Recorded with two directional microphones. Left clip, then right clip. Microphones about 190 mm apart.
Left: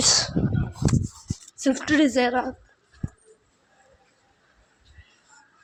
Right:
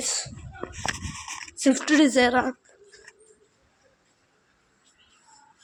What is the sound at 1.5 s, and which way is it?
A woman's voice, 10° right (ahead or behind).